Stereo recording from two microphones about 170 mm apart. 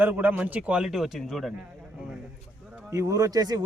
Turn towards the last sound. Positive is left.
turn(degrees=-25)  # may be behind; listen again after turning